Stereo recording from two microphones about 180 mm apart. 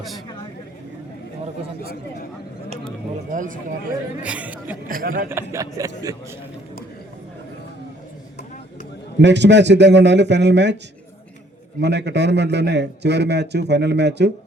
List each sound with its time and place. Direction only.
3.3 s speech: 45° right (ahead or behind)
4.2 s speech: 5° right (ahead or behind)
4.9 s speech: 50° right (ahead or behind)
5.3 s speech: 15° right (ahead or behind)
9.2 s a man's voice: 75° right (ahead or behind)
11.8 s a man's voice: 70° right (ahead or behind)